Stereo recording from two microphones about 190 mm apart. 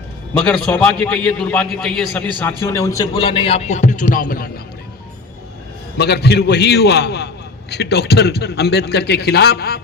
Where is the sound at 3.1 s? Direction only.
30° left (ahead or behind); by 4.5 s 50° left (ahead or behind).